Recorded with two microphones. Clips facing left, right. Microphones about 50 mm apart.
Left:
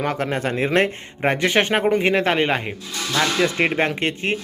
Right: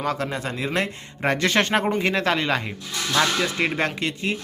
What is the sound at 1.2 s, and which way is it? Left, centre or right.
Speech, centre.